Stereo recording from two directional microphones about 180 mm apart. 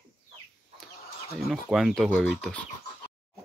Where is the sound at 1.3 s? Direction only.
Centre (ahead or behind).